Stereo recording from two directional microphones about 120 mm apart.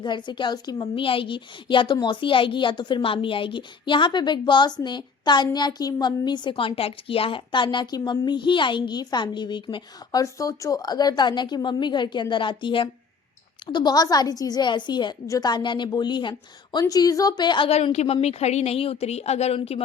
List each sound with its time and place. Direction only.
0.0 s a woman's voice: 40° left (ahead or behind)
17.7 s speech: 60° left (ahead or behind)